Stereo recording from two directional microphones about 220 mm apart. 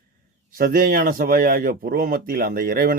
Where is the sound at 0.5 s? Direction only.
40° right (ahead or behind).